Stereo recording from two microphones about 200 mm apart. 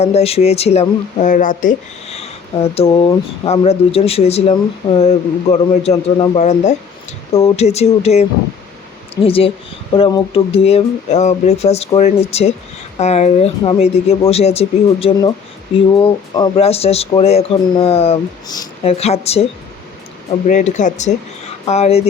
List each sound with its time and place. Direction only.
0.0 s speech: 30° left (ahead or behind)
18.8 s speech: 30° left (ahead or behind)
20.5 s speech: 40° left (ahead or behind)